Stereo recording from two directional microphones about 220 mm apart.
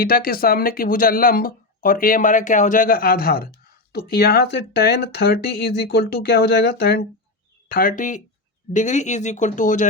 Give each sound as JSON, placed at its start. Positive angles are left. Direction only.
{"t": 0.0, "sound": "speech", "side_deg": 40}